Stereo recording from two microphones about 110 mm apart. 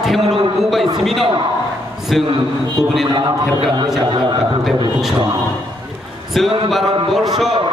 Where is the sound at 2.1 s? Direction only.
Centre (ahead or behind).